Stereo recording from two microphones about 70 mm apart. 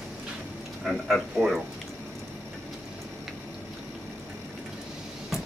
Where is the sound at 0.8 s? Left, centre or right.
Centre.